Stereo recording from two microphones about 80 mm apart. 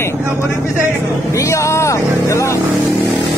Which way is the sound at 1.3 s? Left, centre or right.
Left.